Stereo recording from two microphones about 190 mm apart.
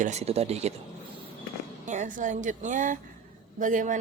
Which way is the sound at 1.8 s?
40° right (ahead or behind).